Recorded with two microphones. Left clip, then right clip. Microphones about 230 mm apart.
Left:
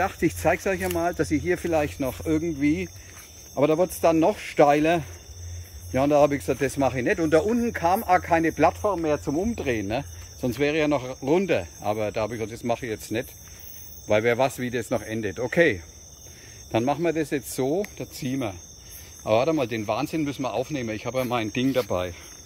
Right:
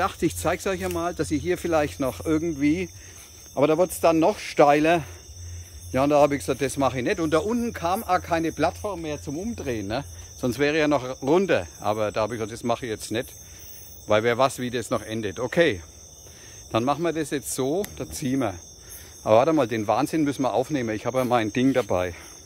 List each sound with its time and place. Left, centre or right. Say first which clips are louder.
0.0 s speech: left 1 dB; centre
9.7 s speech: left 2 dB; centre